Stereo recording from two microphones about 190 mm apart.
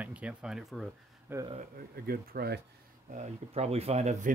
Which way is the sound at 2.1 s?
55° right (ahead or behind).